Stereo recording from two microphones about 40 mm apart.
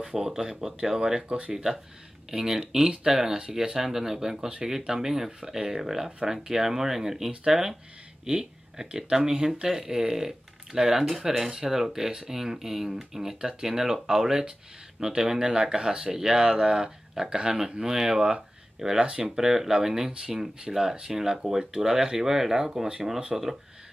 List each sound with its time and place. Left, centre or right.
0.0 s speech: centre